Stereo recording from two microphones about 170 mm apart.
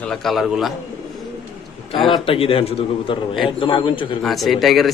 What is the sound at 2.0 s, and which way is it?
A man's voice, 30° left (ahead or behind).